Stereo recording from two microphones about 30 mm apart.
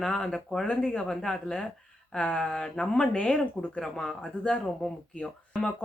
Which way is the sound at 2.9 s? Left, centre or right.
Left.